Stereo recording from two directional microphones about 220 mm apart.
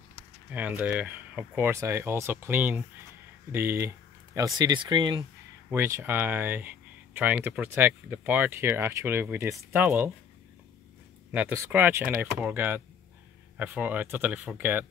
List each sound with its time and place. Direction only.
0.5 s speech: 5° right (ahead or behind)
11.3 s speech: 10° right (ahead or behind)